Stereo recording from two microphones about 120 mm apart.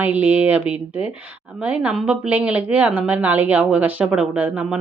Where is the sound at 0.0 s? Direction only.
15° right (ahead or behind).